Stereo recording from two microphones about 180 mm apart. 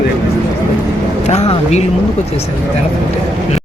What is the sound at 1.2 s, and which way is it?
Speech, 35° left (ahead or behind).